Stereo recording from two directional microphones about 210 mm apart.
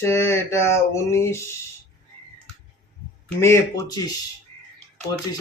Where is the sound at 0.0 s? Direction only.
10° left (ahead or behind).